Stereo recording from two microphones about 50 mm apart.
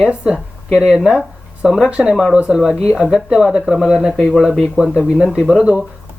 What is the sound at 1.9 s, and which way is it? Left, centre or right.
Speech, centre.